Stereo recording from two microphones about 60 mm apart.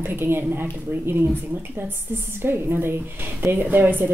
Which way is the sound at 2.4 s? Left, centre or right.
Right.